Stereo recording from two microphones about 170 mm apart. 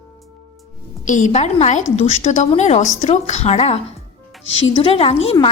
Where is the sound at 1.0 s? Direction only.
45° left (ahead or behind).